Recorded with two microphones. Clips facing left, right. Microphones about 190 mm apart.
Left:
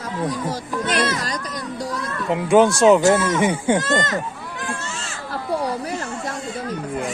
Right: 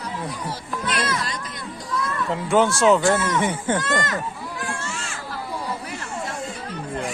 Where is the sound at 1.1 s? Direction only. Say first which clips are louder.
Left 2 dB; 40° left (ahead or behind).